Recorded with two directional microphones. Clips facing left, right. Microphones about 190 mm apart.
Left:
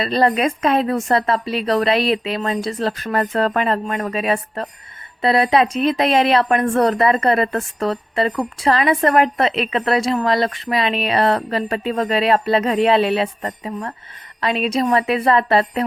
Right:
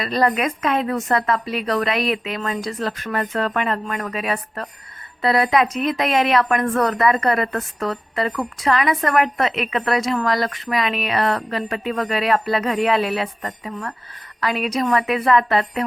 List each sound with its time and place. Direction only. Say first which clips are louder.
0.0 s speech: left 3 dB; 30° left (ahead or behind)